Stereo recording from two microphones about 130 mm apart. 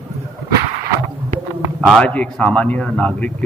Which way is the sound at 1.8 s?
5° left (ahead or behind).